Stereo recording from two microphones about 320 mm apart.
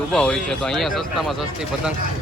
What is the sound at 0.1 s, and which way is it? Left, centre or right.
Speech, centre.